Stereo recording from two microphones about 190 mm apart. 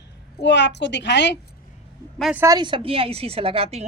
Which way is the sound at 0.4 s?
65° left (ahead or behind).